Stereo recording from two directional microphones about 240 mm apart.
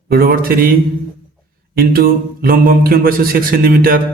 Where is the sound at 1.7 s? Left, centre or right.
Right.